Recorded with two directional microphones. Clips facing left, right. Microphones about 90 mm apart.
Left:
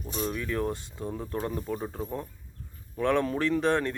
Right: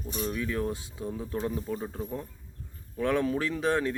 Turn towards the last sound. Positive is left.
turn(degrees=-5)  # may be behind; listen again after turning